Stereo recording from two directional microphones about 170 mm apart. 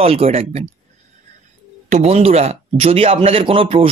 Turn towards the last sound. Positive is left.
turn(degrees=-35)  # may be behind; listen again after turning